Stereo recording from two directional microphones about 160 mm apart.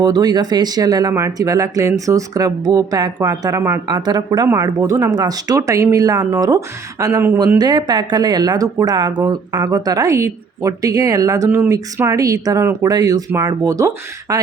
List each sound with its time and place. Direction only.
0.0 s speech: 25° right (ahead or behind)